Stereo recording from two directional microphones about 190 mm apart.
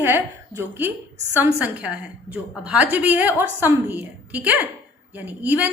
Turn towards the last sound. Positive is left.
turn(degrees=-10)  # may be behind; listen again after turning